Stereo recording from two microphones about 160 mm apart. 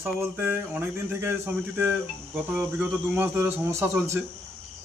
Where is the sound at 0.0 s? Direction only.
10° right (ahead or behind).